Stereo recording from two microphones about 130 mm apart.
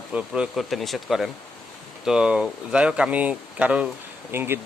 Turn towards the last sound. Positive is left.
turn(degrees=-15)  # may be behind; listen again after turning